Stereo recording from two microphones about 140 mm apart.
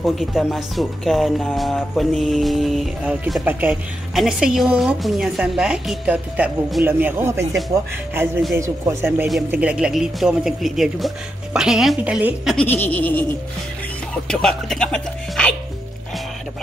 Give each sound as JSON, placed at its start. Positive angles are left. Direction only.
{"t": 0.0, "sound": "speech", "side_deg": 0}
{"t": 3.4, "sound": "speech", "side_deg": -10}
{"t": 8.5, "sound": "speech", "side_deg": -20}
{"t": 12.5, "sound": "giggle", "side_deg": 15}
{"t": 14.1, "sound": "speech", "side_deg": 5}